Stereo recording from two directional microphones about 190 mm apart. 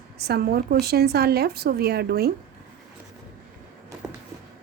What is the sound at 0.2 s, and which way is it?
Speech, 55° right (ahead or behind).